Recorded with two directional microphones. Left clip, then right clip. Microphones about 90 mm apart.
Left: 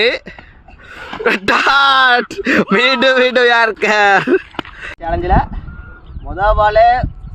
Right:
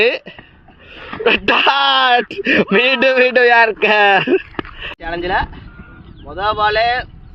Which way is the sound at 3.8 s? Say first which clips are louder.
Even; 60° left (ahead or behind).